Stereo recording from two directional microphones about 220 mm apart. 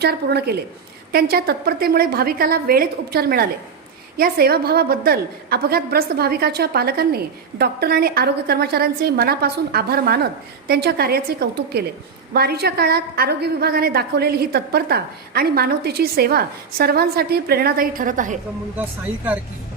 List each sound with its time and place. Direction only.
0.0 s a woman's voice: 45° right (ahead or behind)